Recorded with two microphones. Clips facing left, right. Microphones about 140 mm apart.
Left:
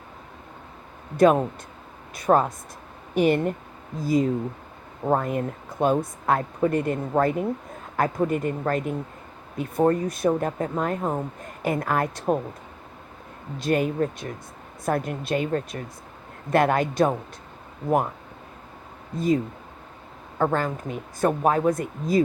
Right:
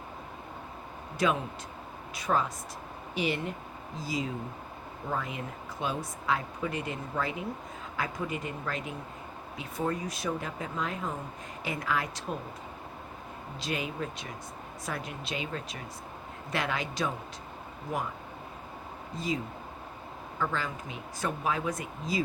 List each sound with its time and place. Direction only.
1.1 s speech: 50° left (ahead or behind)
13.6 s speech: 50° left (ahead or behind)
19.1 s speech: 50° left (ahead or behind)
20.4 s speech: 50° left (ahead or behind)